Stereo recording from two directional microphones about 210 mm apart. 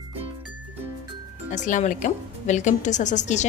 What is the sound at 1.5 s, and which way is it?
A woman's voice, 35° left (ahead or behind).